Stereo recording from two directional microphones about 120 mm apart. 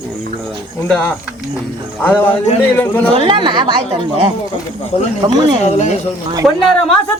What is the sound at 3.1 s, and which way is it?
Speech, 45° right (ahead or behind).